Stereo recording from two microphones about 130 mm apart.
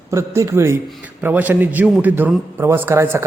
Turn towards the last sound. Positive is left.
turn(degrees=-20)  # may be behind; listen again after turning